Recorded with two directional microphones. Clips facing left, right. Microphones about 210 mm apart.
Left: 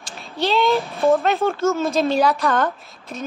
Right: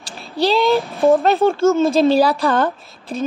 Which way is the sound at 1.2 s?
30° right (ahead or behind).